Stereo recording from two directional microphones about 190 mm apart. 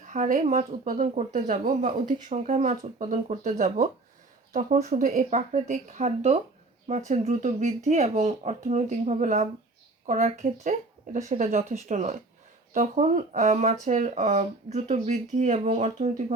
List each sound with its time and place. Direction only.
0.0 s speech: 40° right (ahead or behind)